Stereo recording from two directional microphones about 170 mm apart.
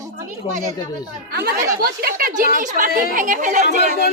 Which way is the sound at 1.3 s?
65° right (ahead or behind).